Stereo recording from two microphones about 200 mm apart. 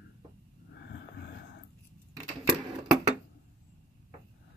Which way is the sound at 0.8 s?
60° left (ahead or behind).